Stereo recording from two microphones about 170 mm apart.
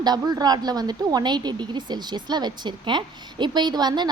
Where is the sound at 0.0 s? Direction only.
25° right (ahead or behind).